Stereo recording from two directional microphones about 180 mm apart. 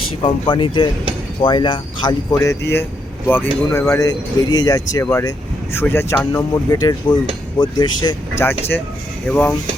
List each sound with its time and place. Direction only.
0.2 s speech: 30° left (ahead or behind)
8.4 s speech: 10° left (ahead or behind)